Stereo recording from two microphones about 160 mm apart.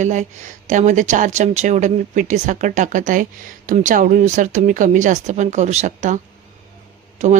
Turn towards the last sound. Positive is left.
turn(degrees=-45)  # may be behind; listen again after turning